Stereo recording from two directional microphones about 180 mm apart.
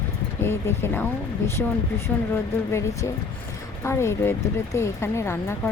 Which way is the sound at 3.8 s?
15° left (ahead or behind).